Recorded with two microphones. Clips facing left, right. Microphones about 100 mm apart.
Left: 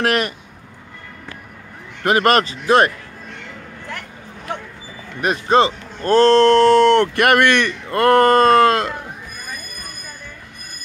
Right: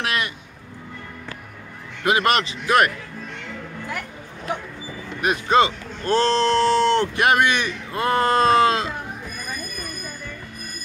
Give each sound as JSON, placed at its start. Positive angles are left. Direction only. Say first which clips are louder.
{"t": 0.0, "sound": "speech", "louder": "left 7 dB", "side_deg": 45}
{"t": 2.0, "sound": "speech", "louder": "left 4 dB", "side_deg": 45}
{"t": 5.2, "sound": "speech", "louder": "left 3 dB", "side_deg": 40}